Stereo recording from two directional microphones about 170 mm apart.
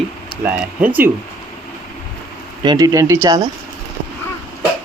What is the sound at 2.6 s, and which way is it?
Speech, 25° right (ahead or behind).